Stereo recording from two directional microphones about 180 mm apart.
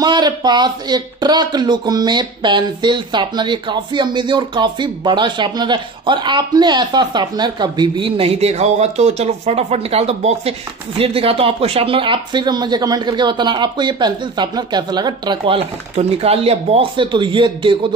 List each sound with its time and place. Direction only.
0.0 s speech: 25° right (ahead or behind)